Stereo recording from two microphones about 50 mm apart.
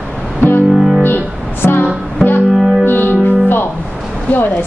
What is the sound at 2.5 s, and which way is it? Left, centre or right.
Music, centre.